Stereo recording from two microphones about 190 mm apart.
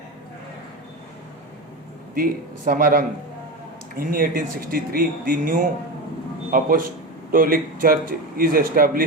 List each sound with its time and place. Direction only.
2.1 s speech: 50° right (ahead or behind)